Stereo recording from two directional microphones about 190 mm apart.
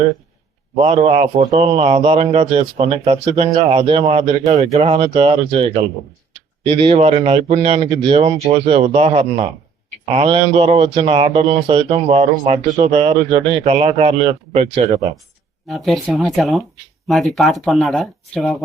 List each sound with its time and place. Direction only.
0.8 s a man's voice: 35° right (ahead or behind)
15.6 s speech: centre (ahead or behind)